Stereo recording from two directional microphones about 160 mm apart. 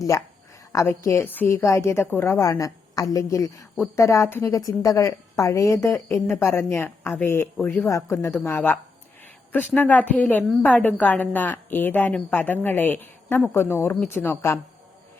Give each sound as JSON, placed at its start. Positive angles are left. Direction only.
{"t": 0.7, "sound": "a woman's voice", "side_deg": 20}